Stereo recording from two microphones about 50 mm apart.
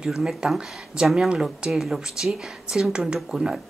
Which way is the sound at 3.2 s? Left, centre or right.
Centre.